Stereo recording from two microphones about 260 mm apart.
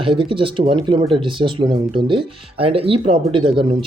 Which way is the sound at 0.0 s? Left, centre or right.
Centre.